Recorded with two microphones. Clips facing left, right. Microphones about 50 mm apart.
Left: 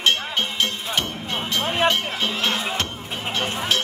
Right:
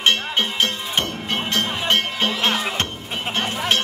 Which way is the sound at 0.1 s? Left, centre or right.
Right.